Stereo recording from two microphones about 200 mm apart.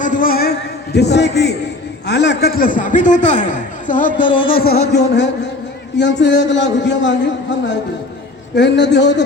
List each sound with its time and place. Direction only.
0.0 s a man's voice: 40° left (ahead or behind)
4.2 s a sound: 25° left (ahead or behind)
4.5 s speech: 50° left (ahead or behind)
8.5 s speech: 60° left (ahead or behind)